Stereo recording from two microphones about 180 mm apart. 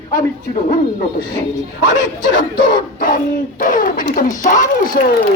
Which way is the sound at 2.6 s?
25° left (ahead or behind).